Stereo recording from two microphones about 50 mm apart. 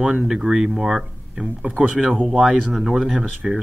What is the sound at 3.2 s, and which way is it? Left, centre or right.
Speech, centre.